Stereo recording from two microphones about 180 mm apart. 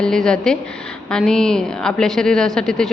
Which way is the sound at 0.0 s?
5° left (ahead or behind).